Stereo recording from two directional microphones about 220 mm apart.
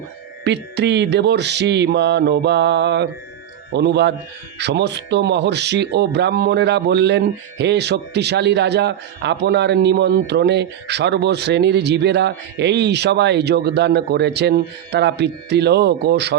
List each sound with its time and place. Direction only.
0.4 s a man's voice: 50° right (ahead or behind)